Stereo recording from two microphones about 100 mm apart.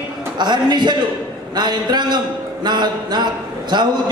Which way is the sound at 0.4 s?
45° right (ahead or behind).